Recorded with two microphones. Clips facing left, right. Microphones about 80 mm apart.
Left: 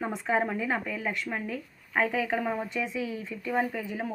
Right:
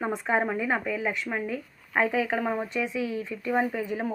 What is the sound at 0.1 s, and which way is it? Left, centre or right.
Speech, right.